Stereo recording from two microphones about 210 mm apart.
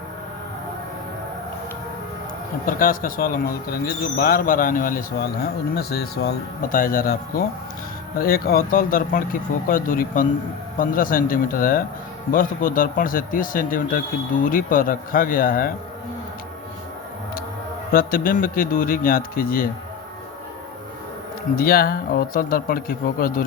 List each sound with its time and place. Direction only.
2.6 s speech: 40° left (ahead or behind)
17.9 s speech: 40° left (ahead or behind)
21.5 s speech: 45° left (ahead or behind)